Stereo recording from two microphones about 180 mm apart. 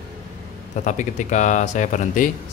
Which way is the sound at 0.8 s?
45° left (ahead or behind).